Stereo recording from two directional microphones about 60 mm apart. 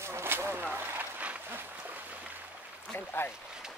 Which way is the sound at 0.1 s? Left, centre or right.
Right.